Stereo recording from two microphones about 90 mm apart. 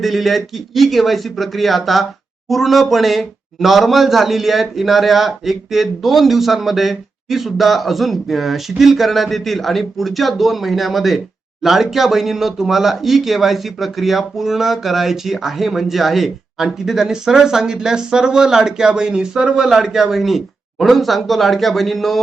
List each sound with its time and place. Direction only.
0.0 s speech: centre (ahead or behind)